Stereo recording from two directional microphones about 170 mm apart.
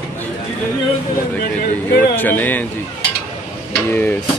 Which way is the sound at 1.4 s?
60° left (ahead or behind).